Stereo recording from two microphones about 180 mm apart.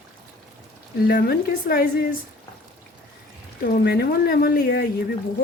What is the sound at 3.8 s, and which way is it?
Speech, 60° left (ahead or behind).